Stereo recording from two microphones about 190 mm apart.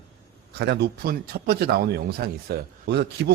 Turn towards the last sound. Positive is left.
turn(degrees=-60)  # may be behind; listen again after turning